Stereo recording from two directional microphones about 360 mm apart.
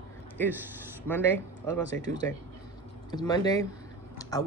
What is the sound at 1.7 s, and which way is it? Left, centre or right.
Speech, centre.